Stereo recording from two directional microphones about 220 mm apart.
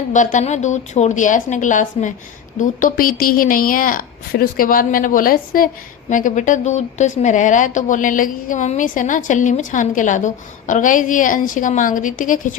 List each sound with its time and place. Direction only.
0.1 s a woman's voice: 35° left (ahead or behind)